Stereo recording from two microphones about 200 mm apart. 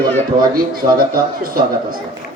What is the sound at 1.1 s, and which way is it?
Speech, 45° right (ahead or behind).